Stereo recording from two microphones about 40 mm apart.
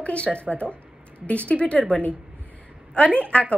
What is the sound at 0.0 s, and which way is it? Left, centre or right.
A woman's voice, left.